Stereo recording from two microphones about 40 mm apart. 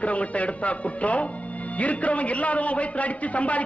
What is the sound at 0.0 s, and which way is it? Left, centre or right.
A man's voice, left.